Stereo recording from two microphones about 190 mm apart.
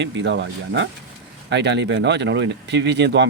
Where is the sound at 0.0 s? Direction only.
70° right (ahead or behind).